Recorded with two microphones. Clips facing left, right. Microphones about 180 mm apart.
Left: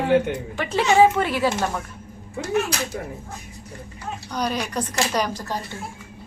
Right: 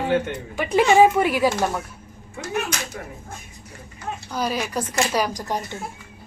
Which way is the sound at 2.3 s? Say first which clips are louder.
Left 4 dB; 35° left (ahead or behind).